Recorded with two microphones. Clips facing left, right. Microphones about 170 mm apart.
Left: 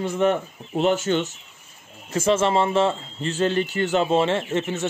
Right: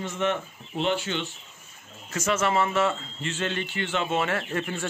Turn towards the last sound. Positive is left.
turn(degrees=20)  # may be behind; listen again after turning